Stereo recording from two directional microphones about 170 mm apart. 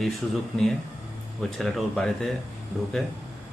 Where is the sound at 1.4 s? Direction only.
Centre (ahead or behind).